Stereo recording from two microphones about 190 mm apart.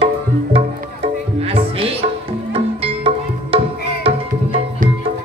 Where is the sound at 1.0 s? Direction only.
30° right (ahead or behind).